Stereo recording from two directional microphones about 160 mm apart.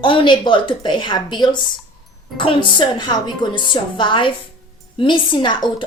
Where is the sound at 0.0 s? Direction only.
35° left (ahead or behind).